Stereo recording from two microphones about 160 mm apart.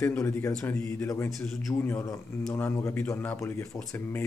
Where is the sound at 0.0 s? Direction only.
15° left (ahead or behind).